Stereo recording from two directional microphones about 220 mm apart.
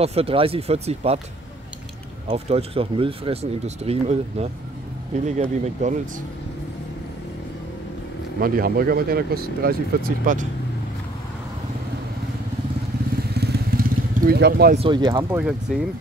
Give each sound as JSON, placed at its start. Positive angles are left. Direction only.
{"t": 0.0, "sound": "speech", "side_deg": -25}
{"t": 2.2, "sound": "speech", "side_deg": -25}
{"t": 8.4, "sound": "speech", "side_deg": -40}
{"t": 13.3, "sound": "vehicle", "side_deg": -45}
{"t": 14.8, "sound": "speech", "side_deg": -20}
{"t": 15.3, "sound": "speech", "side_deg": 0}